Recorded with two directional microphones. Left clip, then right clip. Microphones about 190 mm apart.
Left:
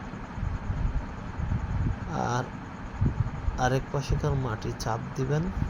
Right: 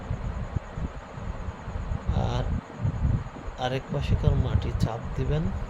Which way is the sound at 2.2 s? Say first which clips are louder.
Left 3 dB; centre (ahead or behind).